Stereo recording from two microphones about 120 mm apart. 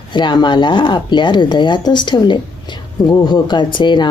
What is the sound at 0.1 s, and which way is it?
Speech, 40° left (ahead or behind).